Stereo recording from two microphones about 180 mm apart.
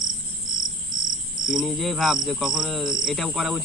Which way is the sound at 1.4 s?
Centre (ahead or behind).